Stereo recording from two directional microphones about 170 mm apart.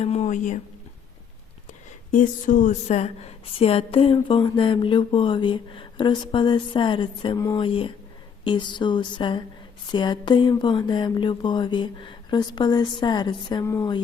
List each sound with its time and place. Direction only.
0.0 s speech: 40° left (ahead or behind)
2.1 s a woman's voice: 50° left (ahead or behind); by 14.0 s 20° left (ahead or behind)